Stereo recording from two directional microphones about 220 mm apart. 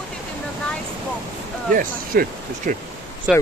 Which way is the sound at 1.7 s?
40° right (ahead or behind).